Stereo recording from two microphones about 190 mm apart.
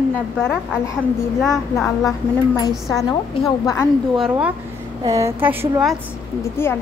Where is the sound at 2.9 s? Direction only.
20° left (ahead or behind).